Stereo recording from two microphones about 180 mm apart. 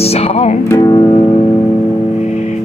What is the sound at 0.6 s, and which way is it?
Music, 15° left (ahead or behind).